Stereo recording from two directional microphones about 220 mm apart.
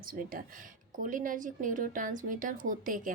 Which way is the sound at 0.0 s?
40° right (ahead or behind).